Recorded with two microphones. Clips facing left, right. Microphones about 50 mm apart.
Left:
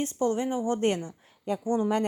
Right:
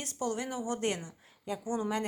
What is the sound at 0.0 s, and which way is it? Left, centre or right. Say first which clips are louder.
A woman's voice: left 8 dB; left.